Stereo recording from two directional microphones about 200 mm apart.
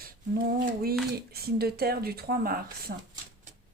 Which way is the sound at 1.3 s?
50° right (ahead or behind).